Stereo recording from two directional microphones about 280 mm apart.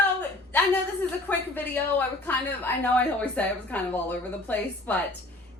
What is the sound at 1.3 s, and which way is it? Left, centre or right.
A woman's voice, centre.